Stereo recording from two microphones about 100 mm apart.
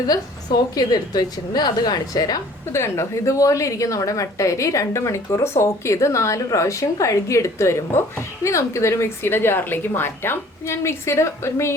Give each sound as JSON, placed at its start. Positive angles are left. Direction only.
{"t": 0.8, "sound": "a woman's voice", "side_deg": 40}
{"t": 2.7, "sound": "a woman's voice", "side_deg": 30}